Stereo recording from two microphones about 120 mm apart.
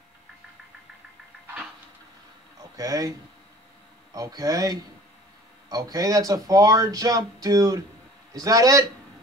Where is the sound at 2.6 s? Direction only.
30° right (ahead or behind).